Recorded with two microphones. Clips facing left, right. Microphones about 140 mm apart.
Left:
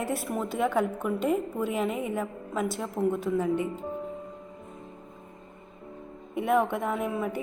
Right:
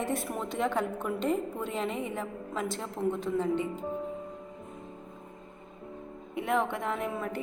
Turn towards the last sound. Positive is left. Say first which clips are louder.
# left 3 dB
turn(degrees=10)  # may be behind; listen again after turning